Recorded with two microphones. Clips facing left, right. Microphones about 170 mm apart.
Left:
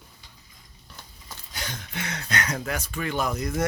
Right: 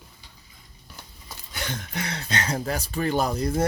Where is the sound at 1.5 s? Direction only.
45° right (ahead or behind).